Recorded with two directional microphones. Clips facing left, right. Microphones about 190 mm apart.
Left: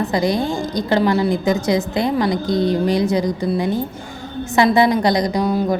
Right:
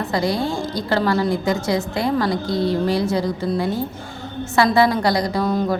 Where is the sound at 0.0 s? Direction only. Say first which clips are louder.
Left 3 dB; 20° left (ahead or behind).